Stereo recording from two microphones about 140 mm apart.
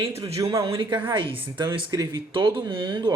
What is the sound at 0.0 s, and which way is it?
Speech, 45° right (ahead or behind).